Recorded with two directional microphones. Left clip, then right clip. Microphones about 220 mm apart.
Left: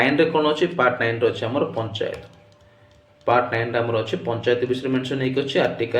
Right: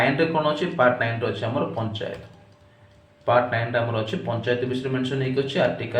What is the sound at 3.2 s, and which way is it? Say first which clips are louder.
Speech: left 1 dB; 45° left (ahead or behind).